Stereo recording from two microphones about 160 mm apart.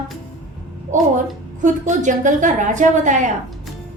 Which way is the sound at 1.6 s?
50° right (ahead or behind).